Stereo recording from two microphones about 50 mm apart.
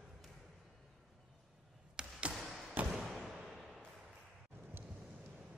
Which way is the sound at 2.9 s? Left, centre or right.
Centre.